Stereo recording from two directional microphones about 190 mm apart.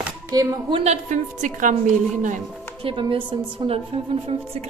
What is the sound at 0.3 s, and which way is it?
Speech, 25° right (ahead or behind).